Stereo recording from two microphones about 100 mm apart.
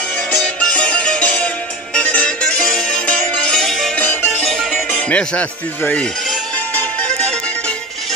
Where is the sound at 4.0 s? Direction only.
15° left (ahead or behind).